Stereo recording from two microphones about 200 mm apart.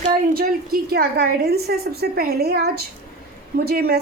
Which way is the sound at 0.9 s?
50° right (ahead or behind).